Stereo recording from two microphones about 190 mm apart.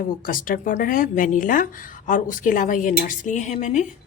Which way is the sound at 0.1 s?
45° left (ahead or behind).